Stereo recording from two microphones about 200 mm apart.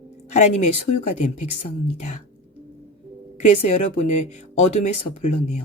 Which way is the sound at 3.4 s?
35° left (ahead or behind).